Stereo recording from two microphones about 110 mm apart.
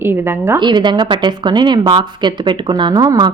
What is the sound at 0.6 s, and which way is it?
Speech, 45° right (ahead or behind).